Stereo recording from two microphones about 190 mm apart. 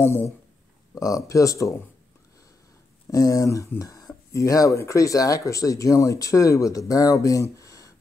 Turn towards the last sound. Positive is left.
turn(degrees=15)  # may be behind; listen again after turning